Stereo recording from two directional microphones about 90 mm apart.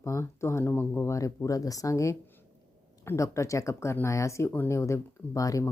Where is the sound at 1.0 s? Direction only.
35° left (ahead or behind).